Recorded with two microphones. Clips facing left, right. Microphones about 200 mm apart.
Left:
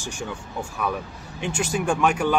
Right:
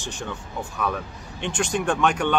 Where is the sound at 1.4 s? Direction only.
5° left (ahead or behind).